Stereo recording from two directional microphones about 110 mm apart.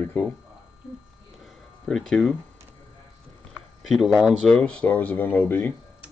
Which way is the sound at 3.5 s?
Centre (ahead or behind).